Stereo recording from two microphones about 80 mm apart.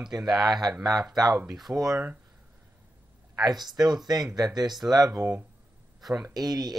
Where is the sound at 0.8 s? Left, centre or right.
Right.